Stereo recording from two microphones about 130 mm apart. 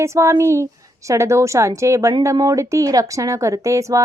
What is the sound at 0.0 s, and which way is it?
Speech, 20° right (ahead or behind).